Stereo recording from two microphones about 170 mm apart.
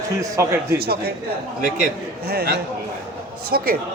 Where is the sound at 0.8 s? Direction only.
65° right (ahead or behind).